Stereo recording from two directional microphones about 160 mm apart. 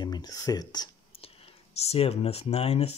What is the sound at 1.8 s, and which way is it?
Speech, 40° left (ahead or behind).